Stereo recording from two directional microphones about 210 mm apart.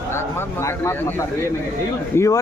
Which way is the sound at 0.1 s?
10° left (ahead or behind).